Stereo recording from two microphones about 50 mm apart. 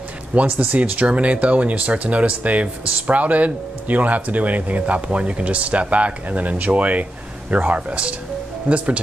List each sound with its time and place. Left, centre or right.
0.3 s speech: right